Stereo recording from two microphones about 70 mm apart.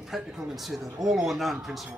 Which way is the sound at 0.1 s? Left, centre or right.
Centre.